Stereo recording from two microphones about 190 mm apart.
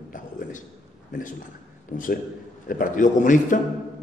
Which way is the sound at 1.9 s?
45° left (ahead or behind).